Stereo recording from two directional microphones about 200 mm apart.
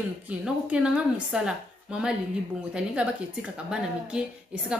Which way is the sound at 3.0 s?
5° right (ahead or behind).